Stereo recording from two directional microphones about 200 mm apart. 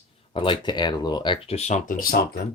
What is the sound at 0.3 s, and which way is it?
Speech, 25° left (ahead or behind).